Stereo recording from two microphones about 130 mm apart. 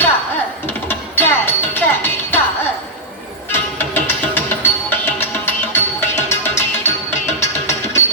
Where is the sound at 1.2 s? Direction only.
15° left (ahead or behind).